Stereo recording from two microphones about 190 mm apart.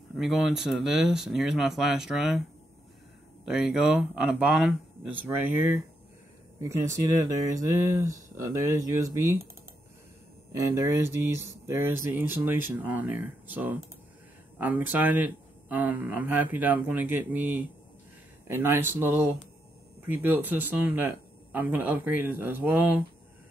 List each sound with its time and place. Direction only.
0.2 s speech: centre (ahead or behind)
3.4 s speech: 5° right (ahead or behind)
10.5 s speech: 15° right (ahead or behind)